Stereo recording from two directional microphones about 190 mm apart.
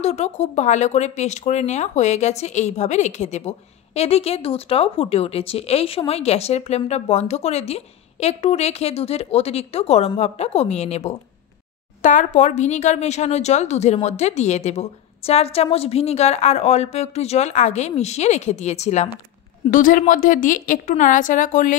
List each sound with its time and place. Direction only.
0.0 s a woman's voice: 35° left (ahead or behind)